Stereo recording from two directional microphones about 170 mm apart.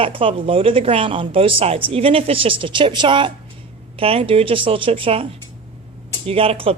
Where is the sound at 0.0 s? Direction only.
30° right (ahead or behind).